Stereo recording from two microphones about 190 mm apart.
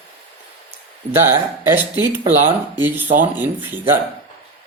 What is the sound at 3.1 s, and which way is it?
Speech, 10° right (ahead or behind).